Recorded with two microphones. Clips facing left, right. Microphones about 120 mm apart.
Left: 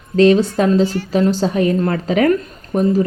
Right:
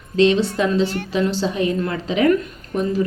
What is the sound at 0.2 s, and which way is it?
A woman's voice, 45° left (ahead or behind).